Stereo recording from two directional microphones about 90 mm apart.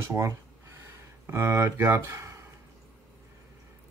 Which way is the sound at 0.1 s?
35° right (ahead or behind).